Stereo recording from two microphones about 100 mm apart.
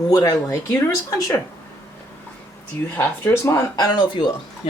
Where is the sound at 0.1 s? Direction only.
40° left (ahead or behind).